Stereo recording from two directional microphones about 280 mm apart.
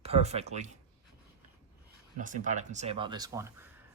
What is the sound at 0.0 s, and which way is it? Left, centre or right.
Speech, right.